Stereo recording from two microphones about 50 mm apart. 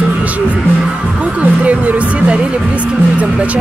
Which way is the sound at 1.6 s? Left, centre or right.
Right.